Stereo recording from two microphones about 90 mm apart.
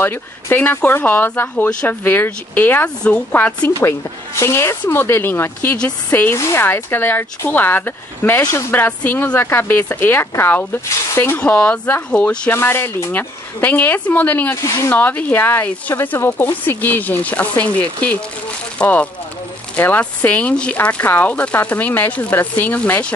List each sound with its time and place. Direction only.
0.0 s speech: 25° left (ahead or behind)
4.4 s speech: 30° left (ahead or behind)
12.4 s speech: 30° left (ahead or behind)
14.6 s speech: 35° left (ahead or behind)
15.0 s speech: 20° left (ahead or behind)